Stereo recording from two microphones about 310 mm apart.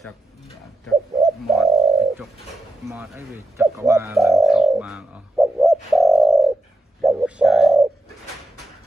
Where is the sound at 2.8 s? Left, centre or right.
Centre.